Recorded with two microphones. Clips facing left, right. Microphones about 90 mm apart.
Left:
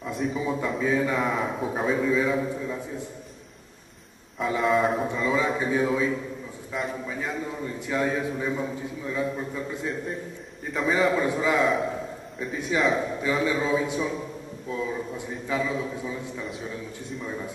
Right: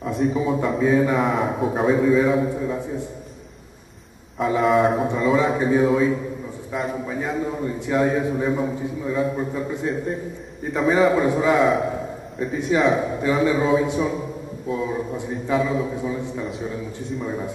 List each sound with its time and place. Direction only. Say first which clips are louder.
0.0 s a man's voice: right 6 dB; centre (ahead or behind)
4.4 s a man's voice: right 5 dB; centre (ahead or behind)
7.1 s a man's voice: right 6 dB; 15° right (ahead or behind)
16.4 s a man's voice: right 6 dB; centre (ahead or behind)